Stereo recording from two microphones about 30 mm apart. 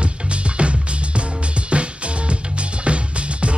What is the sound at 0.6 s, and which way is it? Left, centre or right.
Music, right.